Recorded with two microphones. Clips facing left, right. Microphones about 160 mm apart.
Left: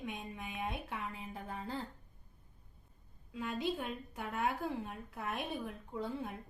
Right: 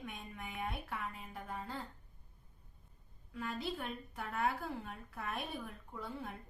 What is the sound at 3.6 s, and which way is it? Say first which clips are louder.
A woman's voice: left 4 dB; 20° left (ahead or behind).